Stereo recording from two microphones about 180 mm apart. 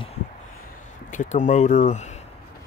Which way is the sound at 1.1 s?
45° left (ahead or behind).